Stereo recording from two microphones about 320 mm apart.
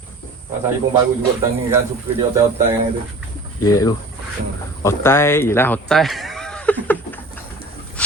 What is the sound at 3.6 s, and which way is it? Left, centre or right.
A man's voice, centre.